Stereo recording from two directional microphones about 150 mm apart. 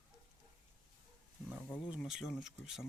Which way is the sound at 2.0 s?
Centre (ahead or behind).